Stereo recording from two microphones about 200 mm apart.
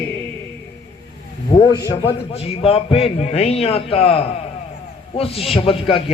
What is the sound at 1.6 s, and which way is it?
A man's voice, 25° left (ahead or behind).